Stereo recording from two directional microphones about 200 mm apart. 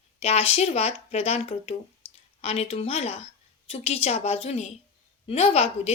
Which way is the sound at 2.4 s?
30° left (ahead or behind).